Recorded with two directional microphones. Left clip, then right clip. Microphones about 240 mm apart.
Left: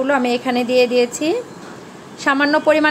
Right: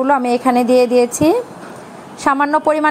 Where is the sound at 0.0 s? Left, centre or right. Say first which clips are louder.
Right 3 dB; right.